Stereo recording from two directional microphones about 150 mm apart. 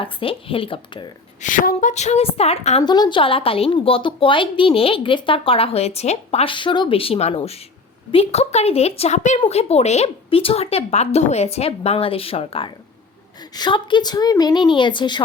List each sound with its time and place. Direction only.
0.0 s speech: 35° left (ahead or behind)
1.4 s a woman's voice: 60° left (ahead or behind); by 2.8 s 45° left (ahead or behind)
2.8 s a woman's voice: 30° left (ahead or behind)